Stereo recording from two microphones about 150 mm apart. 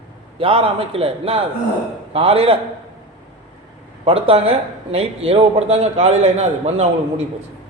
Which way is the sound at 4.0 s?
40° right (ahead or behind).